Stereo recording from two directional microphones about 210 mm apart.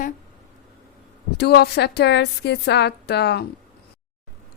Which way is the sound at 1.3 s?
50° left (ahead or behind).